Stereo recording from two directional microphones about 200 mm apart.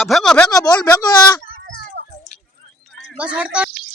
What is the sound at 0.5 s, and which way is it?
Speech, 20° left (ahead or behind).